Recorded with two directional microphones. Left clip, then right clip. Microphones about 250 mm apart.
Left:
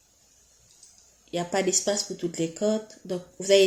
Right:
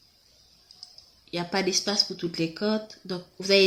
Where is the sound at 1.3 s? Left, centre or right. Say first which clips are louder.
Left 1 dB; right.